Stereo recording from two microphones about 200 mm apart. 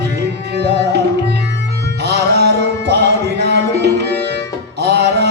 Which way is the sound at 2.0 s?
55° right (ahead or behind).